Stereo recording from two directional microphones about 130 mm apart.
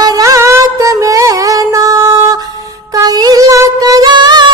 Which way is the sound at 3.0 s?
30° right (ahead or behind).